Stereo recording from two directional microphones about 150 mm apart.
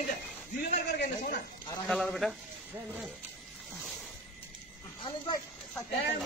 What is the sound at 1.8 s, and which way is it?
Speech, centre (ahead or behind).